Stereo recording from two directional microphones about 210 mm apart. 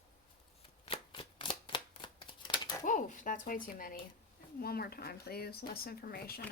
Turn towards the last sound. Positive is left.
turn(degrees=45)  # may be behind; listen again after turning